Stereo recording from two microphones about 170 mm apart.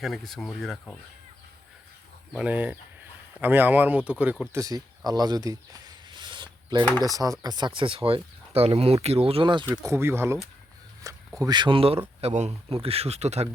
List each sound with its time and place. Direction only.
0.0 s speech: centre (ahead or behind)
2.3 s speech: 5° right (ahead or behind)
4.6 s a sound: 20° right (ahead or behind)
7.0 s speech: 20° right (ahead or behind)
9.6 s speech: 15° right (ahead or behind)
11.3 s speech: 25° right (ahead or behind); by 13.5 s 40° right (ahead or behind)